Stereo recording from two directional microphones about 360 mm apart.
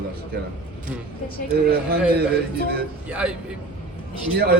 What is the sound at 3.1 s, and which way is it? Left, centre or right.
Speech, centre.